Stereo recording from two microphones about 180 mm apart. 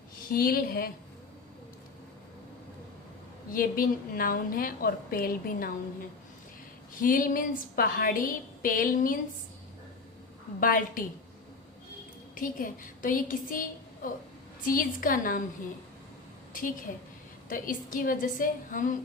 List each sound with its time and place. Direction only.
0.3 s a woman's voice: 55° left (ahead or behind)
3.5 s a woman's voice: 50° left (ahead or behind)
7.0 s a woman's voice: 50° left (ahead or behind)
10.6 s a woman's voice: 50° left (ahead or behind)
12.3 s a woman's voice: 50° left (ahead or behind)
16.5 s a woman's voice: 50° left (ahead or behind)